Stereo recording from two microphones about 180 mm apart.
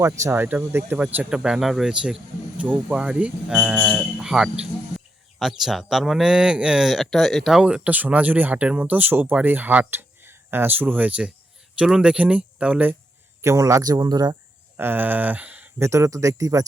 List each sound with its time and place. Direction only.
0.0 s speech: 15° right (ahead or behind)
14.8 s speech: 10° right (ahead or behind)